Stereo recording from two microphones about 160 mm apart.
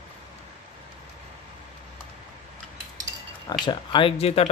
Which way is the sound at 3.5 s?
25° left (ahead or behind).